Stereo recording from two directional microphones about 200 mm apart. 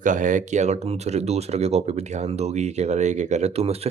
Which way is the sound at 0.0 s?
40° right (ahead or behind).